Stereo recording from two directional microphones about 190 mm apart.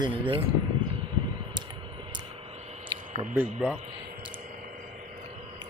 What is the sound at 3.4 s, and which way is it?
Speech, 5° right (ahead or behind).